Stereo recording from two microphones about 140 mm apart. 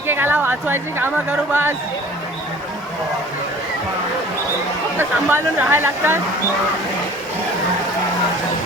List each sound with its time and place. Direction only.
0.1 s speech: 15° right (ahead or behind)
4.9 s speech: 15° right (ahead or behind)